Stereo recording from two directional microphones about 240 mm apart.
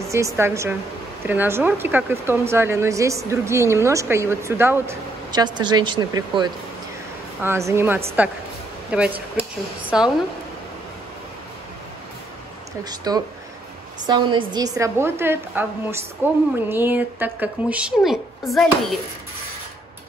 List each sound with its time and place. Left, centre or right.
0.1 s speech: centre
13.0 s speech: centre